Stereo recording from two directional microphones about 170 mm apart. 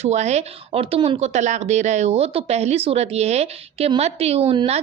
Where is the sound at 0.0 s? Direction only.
40° right (ahead or behind).